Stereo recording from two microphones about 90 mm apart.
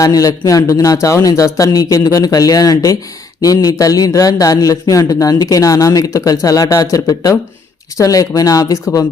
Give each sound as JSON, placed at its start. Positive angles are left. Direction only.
{"t": 0.0, "sound": "speech", "side_deg": 40}